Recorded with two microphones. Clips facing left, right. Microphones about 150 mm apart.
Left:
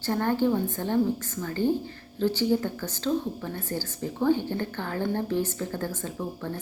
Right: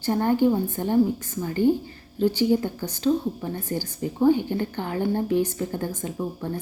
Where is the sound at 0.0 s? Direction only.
15° right (ahead or behind).